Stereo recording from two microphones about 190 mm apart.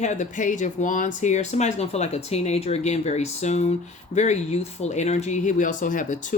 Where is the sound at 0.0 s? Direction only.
40° left (ahead or behind).